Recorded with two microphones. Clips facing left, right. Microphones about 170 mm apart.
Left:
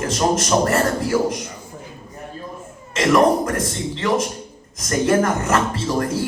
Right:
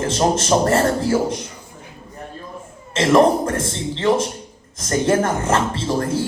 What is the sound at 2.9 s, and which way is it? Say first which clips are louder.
Speech: right 1 dB; 25° right (ahead or behind).